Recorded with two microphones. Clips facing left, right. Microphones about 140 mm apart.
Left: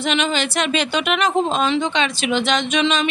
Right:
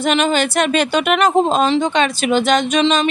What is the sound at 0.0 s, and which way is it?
Speech, 45° right (ahead or behind).